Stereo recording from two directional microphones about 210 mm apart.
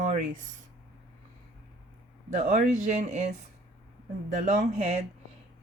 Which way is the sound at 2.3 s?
35° right (ahead or behind).